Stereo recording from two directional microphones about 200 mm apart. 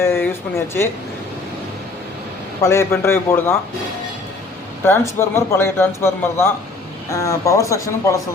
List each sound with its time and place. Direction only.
0.0 s speech: 10° left (ahead or behind)
2.6 s a man's voice: 15° left (ahead or behind)
4.9 s a man's voice: 10° left (ahead or behind)